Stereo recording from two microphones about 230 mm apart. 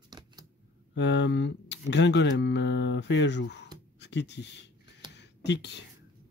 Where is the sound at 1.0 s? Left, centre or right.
Left.